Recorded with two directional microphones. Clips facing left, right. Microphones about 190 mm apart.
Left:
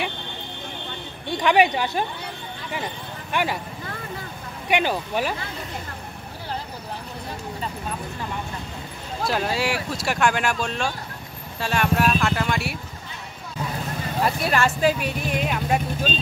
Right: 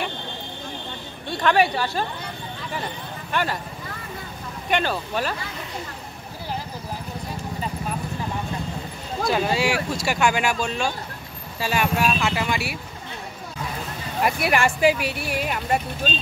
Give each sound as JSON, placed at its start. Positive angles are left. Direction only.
{"t": 1.3, "sound": "speech", "side_deg": 15}
{"t": 4.6, "sound": "speech", "side_deg": 15}
{"t": 9.3, "sound": "speech", "side_deg": 0}
{"t": 14.2, "sound": "speech", "side_deg": -10}